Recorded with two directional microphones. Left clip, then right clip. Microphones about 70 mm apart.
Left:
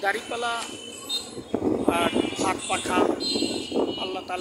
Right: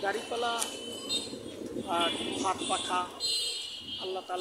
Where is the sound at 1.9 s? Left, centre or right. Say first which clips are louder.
Left 3 dB; left.